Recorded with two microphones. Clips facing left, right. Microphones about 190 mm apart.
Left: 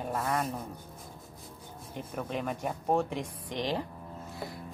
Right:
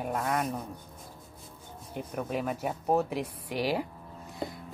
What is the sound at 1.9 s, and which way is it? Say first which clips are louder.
A woman's voice: right 2 dB; 5° right (ahead or behind).